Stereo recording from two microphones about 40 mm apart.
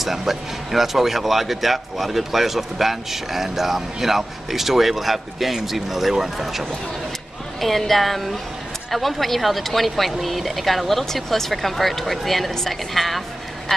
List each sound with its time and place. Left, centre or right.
0.0 s speech: centre
13.7 s speech: centre